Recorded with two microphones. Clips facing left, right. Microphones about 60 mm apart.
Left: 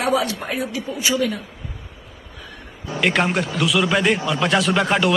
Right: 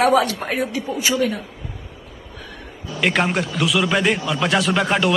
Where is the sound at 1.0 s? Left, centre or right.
Right.